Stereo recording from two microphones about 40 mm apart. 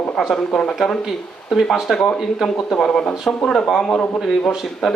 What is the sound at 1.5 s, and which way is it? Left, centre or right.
Speech, centre.